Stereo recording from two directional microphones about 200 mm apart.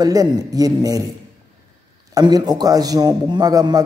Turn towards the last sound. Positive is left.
turn(degrees=-20)  # may be behind; listen again after turning